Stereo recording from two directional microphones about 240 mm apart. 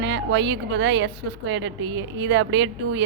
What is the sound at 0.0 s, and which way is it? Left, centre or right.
A woman's voice, right.